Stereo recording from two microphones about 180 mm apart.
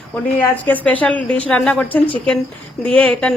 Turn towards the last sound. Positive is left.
turn(degrees=5)  # may be behind; listen again after turning